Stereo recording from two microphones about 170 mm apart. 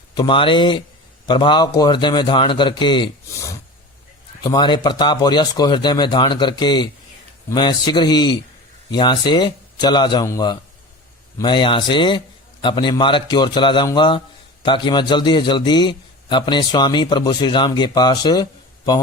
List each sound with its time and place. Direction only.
0.1 s a man's voice: 25° left (ahead or behind)